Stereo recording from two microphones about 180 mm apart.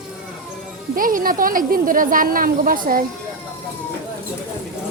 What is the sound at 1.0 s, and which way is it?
A woman's voice, 50° right (ahead or behind).